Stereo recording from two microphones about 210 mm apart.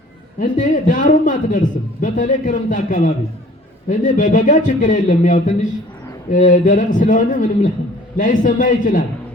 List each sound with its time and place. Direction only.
0.3 s a man's voice: 40° left (ahead or behind)